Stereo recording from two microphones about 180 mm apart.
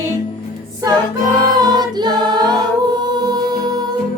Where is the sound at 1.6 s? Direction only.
25° right (ahead or behind).